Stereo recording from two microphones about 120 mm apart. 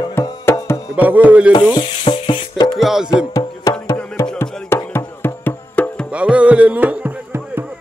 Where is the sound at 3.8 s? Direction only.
25° left (ahead or behind).